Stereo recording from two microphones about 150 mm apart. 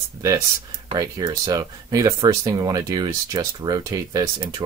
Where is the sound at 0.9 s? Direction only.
25° right (ahead or behind).